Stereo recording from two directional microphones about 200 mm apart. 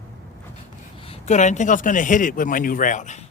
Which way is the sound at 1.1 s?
35° left (ahead or behind).